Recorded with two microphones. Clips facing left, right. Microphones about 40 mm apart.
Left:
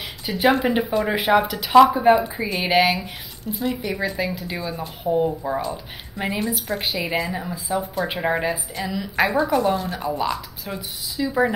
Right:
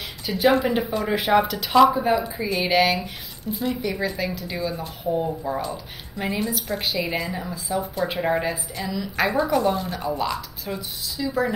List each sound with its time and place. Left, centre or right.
0.4 s a woman's voice: centre
1.8 s a woman's voice: centre
10.3 s speech: centre
11.1 s a woman's voice: centre